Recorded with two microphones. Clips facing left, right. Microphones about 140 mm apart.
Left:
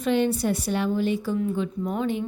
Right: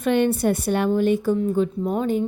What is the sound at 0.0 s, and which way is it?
A woman's voice, 60° right (ahead or behind).